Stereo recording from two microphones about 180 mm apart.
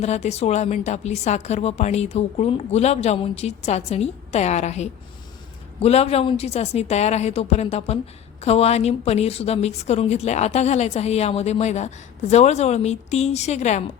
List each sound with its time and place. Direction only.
0.0 s a woman's voice: 40° left (ahead or behind)